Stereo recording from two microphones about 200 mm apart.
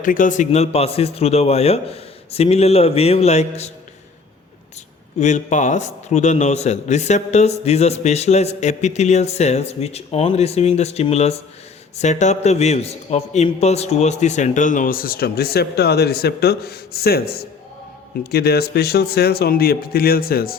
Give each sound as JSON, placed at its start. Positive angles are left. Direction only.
{"t": 0.0, "sound": "a man's voice", "side_deg": 40}
{"t": 5.2, "sound": "a man's voice", "side_deg": 35}